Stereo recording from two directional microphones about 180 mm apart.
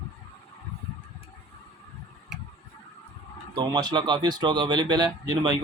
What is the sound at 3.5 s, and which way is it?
Speech, 20° right (ahead or behind).